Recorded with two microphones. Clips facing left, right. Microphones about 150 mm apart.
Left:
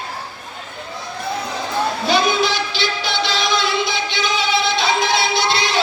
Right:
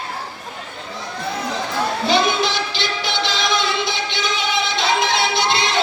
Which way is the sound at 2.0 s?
20° right (ahead or behind).